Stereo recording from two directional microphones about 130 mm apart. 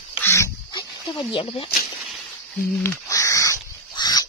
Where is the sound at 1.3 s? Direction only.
40° left (ahead or behind).